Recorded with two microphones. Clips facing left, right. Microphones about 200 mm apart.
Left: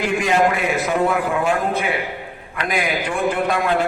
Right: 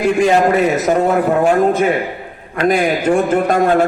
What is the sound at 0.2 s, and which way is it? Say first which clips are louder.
A man's voice: right 6 dB; 35° right (ahead or behind).